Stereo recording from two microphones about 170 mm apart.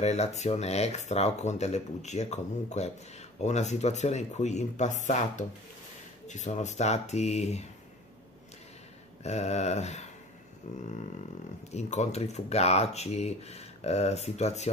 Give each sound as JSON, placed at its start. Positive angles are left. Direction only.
{"t": 0.0, "sound": "speech", "side_deg": 40}
{"t": 9.2, "sound": "speech", "side_deg": 40}
{"t": 10.6, "sound": "a sound", "side_deg": 45}
{"t": 11.7, "sound": "speech", "side_deg": 40}